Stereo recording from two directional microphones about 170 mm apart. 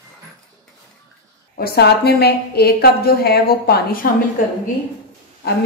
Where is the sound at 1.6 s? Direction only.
70° left (ahead or behind).